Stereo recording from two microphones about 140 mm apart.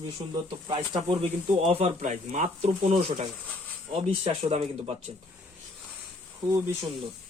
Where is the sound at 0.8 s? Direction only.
35° right (ahead or behind).